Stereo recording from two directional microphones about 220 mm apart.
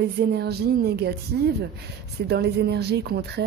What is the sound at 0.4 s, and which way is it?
Speech, 45° right (ahead or behind).